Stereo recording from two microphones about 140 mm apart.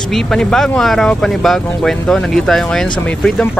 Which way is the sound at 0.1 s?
5° left (ahead or behind).